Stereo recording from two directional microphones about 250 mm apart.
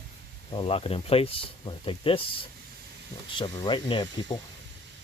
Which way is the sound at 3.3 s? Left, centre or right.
Centre.